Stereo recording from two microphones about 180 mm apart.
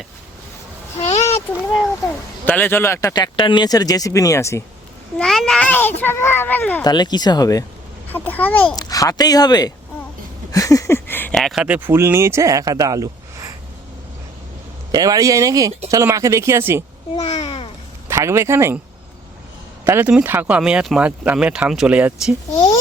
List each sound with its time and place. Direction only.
1.2 s a sound: 15° left (ahead or behind)
2.4 s speech: 10° left (ahead or behind)
5.1 s speech: centre (ahead or behind)
6.8 s speech: 25° left (ahead or behind)
8.1 s speech: 10° left (ahead or behind)
8.7 s speech: 20° left (ahead or behind); by 13.5 s 20° right (ahead or behind)
14.9 s speech: 20° right (ahead or behind)
17.4 s a sound: 35° left (ahead or behind)
18.1 s speech: 15° right (ahead or behind)
19.8 s speech: 10° right (ahead or behind)